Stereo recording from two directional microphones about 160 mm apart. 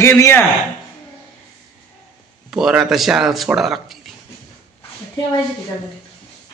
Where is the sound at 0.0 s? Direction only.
15° left (ahead or behind).